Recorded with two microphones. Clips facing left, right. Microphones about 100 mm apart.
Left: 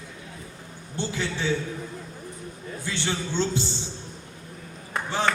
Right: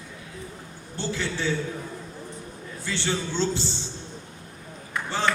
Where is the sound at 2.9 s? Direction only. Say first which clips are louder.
Right 1 dB; 15° left (ahead or behind).